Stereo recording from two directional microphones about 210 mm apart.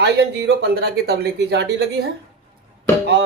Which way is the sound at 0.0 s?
50° right (ahead or behind).